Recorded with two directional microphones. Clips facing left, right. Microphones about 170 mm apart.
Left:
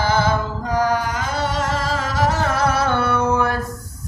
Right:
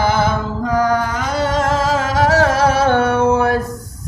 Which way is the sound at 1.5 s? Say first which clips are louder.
Right 6 dB; 90° right.